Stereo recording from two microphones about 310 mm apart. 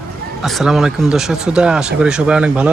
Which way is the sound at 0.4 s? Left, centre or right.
Centre.